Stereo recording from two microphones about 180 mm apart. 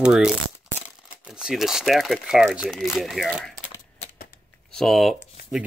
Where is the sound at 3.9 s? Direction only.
35° left (ahead or behind).